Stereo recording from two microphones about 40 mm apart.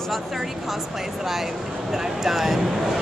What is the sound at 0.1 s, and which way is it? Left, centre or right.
Speech, centre.